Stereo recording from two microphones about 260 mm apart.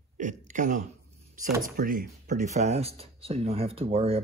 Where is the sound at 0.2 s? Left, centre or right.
Right.